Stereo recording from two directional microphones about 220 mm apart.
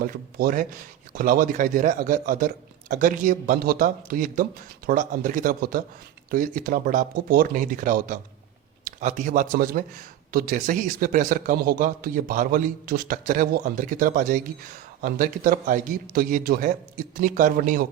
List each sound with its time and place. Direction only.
0.0 s a man's voice: 40° right (ahead or behind)